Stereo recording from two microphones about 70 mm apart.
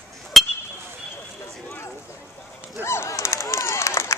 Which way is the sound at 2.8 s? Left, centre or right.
Left.